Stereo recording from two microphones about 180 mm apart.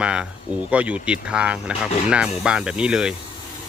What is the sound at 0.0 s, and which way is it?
Speech, 5° right (ahead or behind).